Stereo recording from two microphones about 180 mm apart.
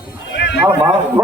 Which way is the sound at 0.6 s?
30° right (ahead or behind).